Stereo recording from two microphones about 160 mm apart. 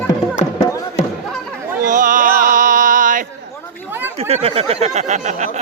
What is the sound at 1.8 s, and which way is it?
Music, 55° right (ahead or behind).